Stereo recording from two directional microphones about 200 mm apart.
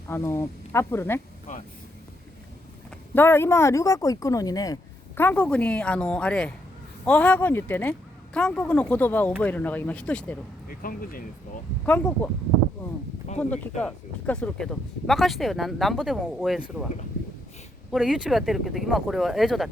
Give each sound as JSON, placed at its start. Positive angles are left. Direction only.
{"t": 0.1, "sound": "speech", "side_deg": 10}
{"t": 1.5, "sound": "speech", "side_deg": 35}
{"t": 3.2, "sound": "speech", "side_deg": 10}
{"t": 10.7, "sound": "speech", "side_deg": 45}
{"t": 11.9, "sound": "speech", "side_deg": 10}
{"t": 13.4, "sound": "speech", "side_deg": 5}
{"t": 17.9, "sound": "speech", "side_deg": -5}